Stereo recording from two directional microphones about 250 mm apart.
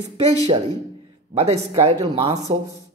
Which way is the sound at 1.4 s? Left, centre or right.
Right.